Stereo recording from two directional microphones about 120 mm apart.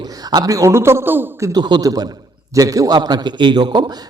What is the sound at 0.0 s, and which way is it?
A man's voice, 35° right (ahead or behind).